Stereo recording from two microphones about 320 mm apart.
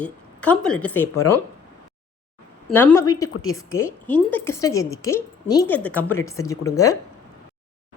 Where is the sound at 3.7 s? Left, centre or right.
Centre.